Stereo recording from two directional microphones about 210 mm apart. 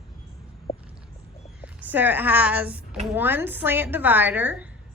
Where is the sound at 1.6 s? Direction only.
10° right (ahead or behind).